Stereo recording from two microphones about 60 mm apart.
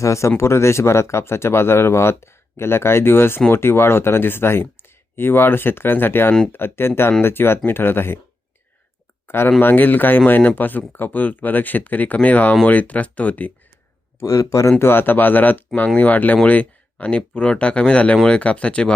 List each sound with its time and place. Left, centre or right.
0.0 s speech: left
9.2 s speech: left
14.2 s speech: left
14.8 s speech: left; by 18.9 s centre